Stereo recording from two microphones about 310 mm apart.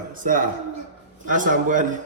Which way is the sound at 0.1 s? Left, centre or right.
Right.